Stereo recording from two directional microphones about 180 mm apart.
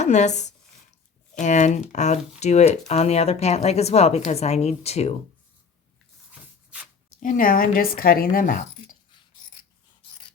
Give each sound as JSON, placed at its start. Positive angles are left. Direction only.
{"t": 0.0, "sound": "speech", "side_deg": 40}
{"t": 6.7, "sound": "writing", "side_deg": -5}
{"t": 7.2, "sound": "speech", "side_deg": 50}
{"t": 10.0, "sound": "dog", "side_deg": 30}